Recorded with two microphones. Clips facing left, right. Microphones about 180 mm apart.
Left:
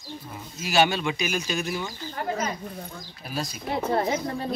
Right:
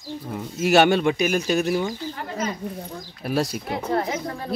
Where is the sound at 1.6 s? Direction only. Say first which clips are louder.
Right 7 dB; 40° right (ahead or behind).